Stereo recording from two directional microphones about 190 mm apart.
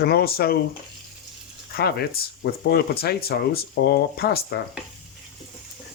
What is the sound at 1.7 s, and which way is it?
Speech, 55° left (ahead or behind).